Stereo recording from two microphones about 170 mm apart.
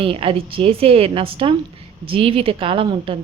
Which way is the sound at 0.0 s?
35° right (ahead or behind).